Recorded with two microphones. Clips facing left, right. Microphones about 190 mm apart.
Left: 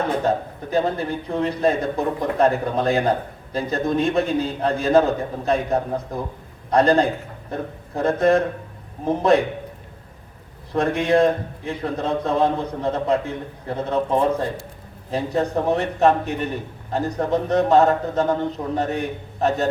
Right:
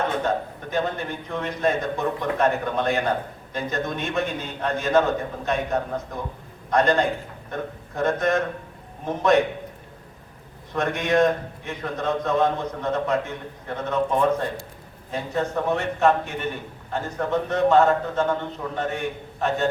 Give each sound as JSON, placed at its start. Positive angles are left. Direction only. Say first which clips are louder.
{"t": 0.3, "sound": "a man's voice", "louder": "left 3 dB", "side_deg": 35}
{"t": 10.7, "sound": "a man's voice", "louder": "left 4 dB", "side_deg": 30}